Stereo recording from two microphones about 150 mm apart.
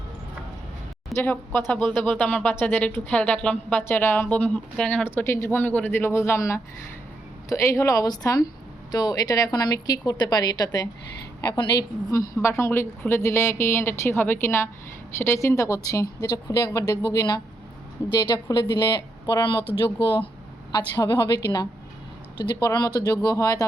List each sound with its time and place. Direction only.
1.2 s a woman's voice: 10° left (ahead or behind); by 20.3 s 35° left (ahead or behind)
20.7 s a woman's voice: 20° left (ahead or behind)